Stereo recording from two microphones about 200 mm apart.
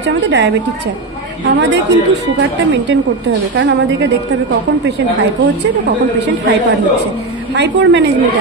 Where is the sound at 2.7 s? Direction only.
60° right (ahead or behind).